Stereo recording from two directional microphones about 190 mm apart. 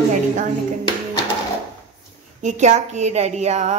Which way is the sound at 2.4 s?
40° right (ahead or behind).